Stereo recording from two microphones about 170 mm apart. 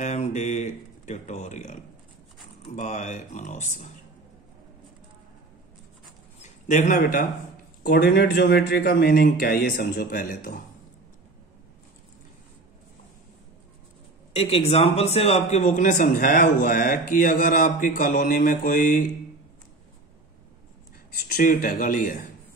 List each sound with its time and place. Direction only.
0.0 s speech: 45° left (ahead or behind)
6.4 s speech: 45° left (ahead or behind)
7.8 s speech: 65° left (ahead or behind)
14.3 s a man's voice: 35° left (ahead or behind)
15.6 s speech: 50° left (ahead or behind)
21.3 s speech: 55° left (ahead or behind)